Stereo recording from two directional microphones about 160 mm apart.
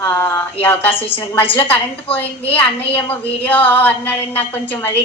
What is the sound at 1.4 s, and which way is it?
Speech, 35° left (ahead or behind).